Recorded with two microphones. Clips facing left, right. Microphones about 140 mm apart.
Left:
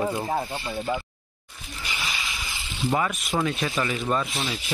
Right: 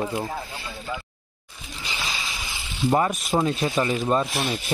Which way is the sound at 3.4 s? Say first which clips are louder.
Right 2 dB; 30° right (ahead or behind).